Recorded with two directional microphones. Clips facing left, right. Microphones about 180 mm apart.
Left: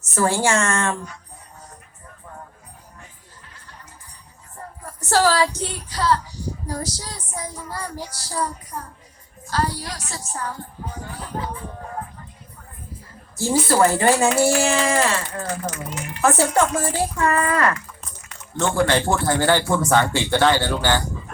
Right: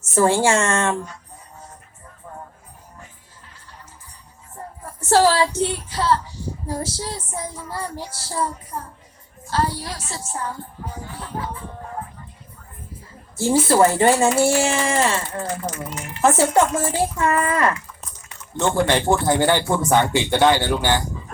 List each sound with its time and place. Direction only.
0.0 s speech: 25° right (ahead or behind)
4.9 s child singing: 25° right (ahead or behind)
7.7 s speech: 25° right (ahead or behind)
13.3 s speech: 25° right (ahead or behind)